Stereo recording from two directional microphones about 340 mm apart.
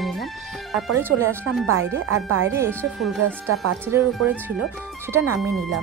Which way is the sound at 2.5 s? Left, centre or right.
Centre.